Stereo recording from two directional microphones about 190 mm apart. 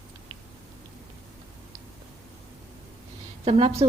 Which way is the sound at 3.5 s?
30° right (ahead or behind).